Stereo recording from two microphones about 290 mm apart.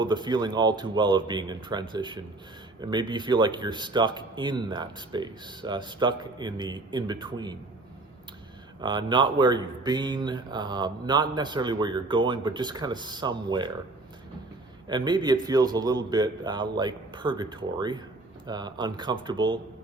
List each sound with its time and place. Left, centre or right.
0.0 s speech: centre
8.8 s speech: centre
14.8 s speech: centre